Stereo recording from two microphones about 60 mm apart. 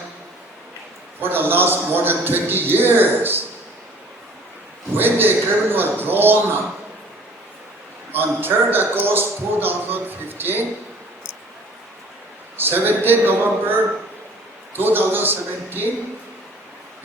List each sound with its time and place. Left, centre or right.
1.2 s a man's voice: right
4.9 s a man's voice: right
8.1 s a man's voice: right
12.5 s a man's voice: right